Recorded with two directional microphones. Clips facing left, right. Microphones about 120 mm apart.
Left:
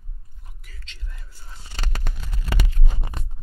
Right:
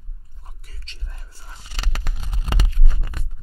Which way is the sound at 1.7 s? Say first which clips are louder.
Even; 90° right.